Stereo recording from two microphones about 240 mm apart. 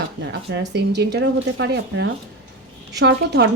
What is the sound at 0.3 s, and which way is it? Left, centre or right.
Speech, right.